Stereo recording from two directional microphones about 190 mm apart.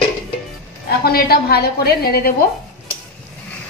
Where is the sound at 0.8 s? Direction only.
55° left (ahead or behind).